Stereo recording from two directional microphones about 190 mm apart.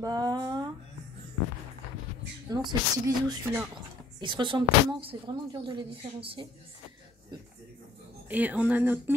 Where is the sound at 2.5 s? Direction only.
20° right (ahead or behind).